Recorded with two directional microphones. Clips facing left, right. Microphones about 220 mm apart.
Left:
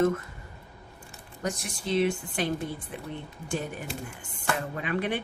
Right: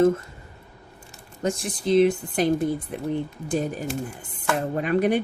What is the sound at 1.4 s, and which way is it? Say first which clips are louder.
Speech: right 7 dB; 25° right (ahead or behind).